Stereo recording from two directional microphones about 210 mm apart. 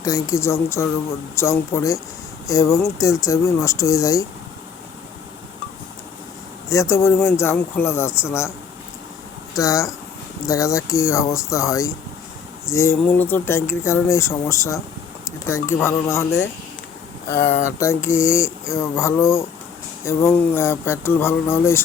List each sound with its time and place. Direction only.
0.0 s speech: 15° left (ahead or behind)
6.7 s speech: 15° left (ahead or behind)
9.6 s speech: 15° left (ahead or behind)